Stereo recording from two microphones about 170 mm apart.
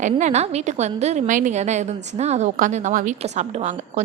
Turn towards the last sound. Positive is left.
turn(degrees=-45)  # may be behind; listen again after turning